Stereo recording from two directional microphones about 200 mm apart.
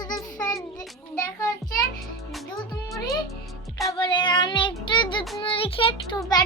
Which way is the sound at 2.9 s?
15° left (ahead or behind).